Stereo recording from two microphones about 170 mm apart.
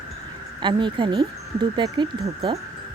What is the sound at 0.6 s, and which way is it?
Speech, 30° right (ahead or behind).